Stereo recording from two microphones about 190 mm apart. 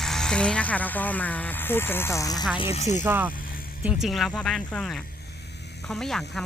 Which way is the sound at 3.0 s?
10° right (ahead or behind).